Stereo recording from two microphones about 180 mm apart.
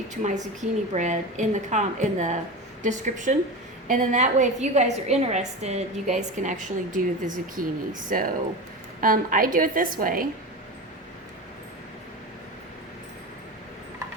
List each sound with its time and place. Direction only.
0.1 s a woman's voice: 40° right (ahead or behind)